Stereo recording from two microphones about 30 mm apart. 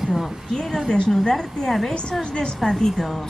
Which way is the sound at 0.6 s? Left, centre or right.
Centre.